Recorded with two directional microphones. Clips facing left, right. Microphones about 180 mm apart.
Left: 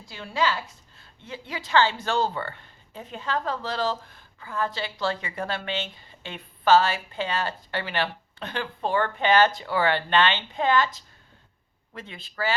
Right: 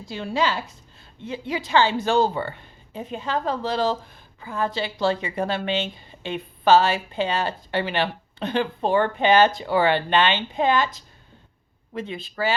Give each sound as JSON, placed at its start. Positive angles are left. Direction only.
{"t": 0.1, "sound": "a woman's voice", "side_deg": -20}